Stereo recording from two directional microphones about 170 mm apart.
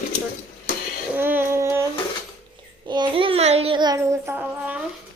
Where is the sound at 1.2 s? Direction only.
10° right (ahead or behind).